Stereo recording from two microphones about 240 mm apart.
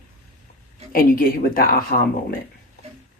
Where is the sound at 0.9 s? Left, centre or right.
Left.